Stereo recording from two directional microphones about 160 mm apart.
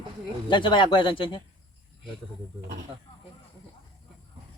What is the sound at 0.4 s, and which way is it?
Speech, 30° left (ahead or behind).